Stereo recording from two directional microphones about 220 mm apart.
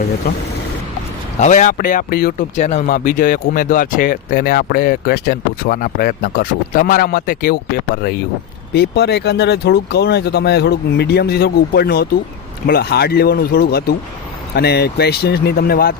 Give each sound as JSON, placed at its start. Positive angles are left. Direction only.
{"t": 1.4, "sound": "speech", "side_deg": 35}
{"t": 2.6, "sound": "speech", "side_deg": 35}
{"t": 8.7, "sound": "speech", "side_deg": 50}